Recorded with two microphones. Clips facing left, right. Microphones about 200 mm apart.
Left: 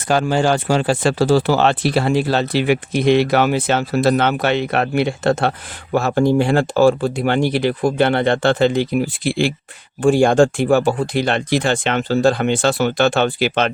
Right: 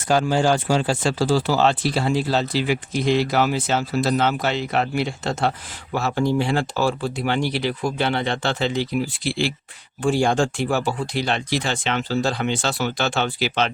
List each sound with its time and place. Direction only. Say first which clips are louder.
0.1 s speech: left 2 dB; 65° left (ahead or behind)